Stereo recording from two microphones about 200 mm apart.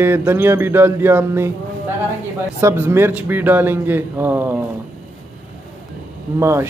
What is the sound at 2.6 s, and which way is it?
A man's voice, 10° right (ahead or behind).